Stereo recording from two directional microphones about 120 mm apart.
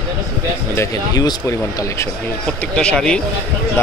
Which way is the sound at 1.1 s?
30° left (ahead or behind).